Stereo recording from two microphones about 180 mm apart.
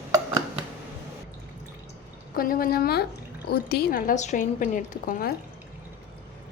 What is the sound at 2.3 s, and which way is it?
A woman's voice, 55° left (ahead or behind).